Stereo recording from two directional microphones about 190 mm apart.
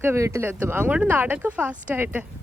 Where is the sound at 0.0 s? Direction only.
15° right (ahead or behind).